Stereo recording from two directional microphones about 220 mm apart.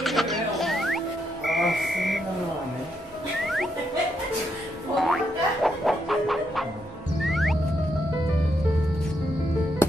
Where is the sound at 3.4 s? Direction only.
Centre (ahead or behind).